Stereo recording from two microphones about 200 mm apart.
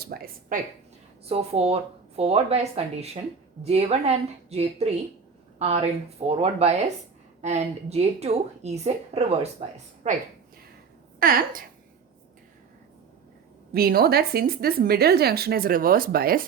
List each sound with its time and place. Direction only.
0.0 s speech: 45° right (ahead or behind)
1.3 s a woman's voice: 30° right (ahead or behind)
13.7 s speech: 50° right (ahead or behind)